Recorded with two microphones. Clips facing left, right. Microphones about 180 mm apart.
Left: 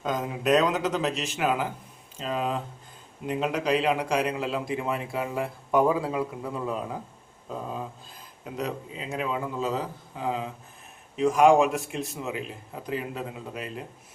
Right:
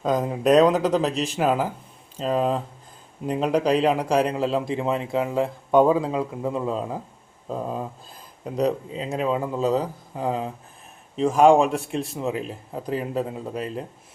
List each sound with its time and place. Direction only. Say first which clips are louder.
0.0 s a man's voice: right 6 dB; 35° right (ahead or behind)
8.5 s speech: right 9 dB; 35° right (ahead or behind)